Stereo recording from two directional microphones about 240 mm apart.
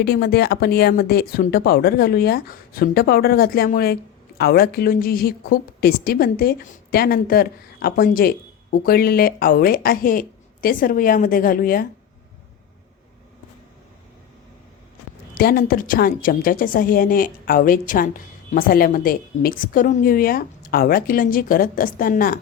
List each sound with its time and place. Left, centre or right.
0.0 s a woman's voice: left
15.4 s a woman's voice: left